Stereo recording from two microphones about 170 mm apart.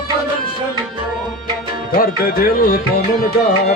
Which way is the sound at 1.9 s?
55° left (ahead or behind).